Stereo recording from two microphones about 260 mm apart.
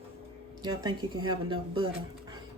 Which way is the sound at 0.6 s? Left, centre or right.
Centre.